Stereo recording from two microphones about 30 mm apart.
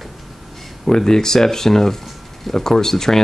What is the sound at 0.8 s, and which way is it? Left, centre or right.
Speech, centre.